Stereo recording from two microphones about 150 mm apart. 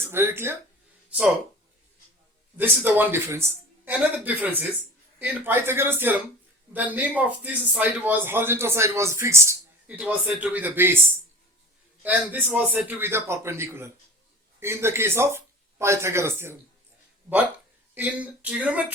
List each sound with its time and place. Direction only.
0.0 s speech: 15° right (ahead or behind)
2.6 s speech: 10° right (ahead or behind)
12.0 s speech: 10° right (ahead or behind)
17.9 s speech: 10° right (ahead or behind)